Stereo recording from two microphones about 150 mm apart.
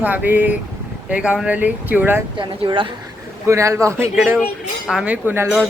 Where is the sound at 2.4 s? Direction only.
35° right (ahead or behind).